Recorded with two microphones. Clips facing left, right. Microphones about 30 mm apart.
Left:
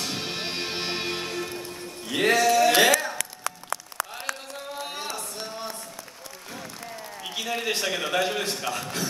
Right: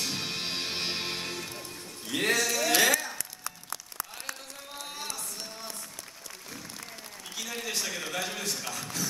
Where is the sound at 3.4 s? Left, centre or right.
Left.